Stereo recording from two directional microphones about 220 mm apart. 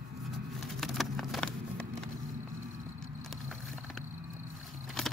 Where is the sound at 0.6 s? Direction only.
Centre (ahead or behind).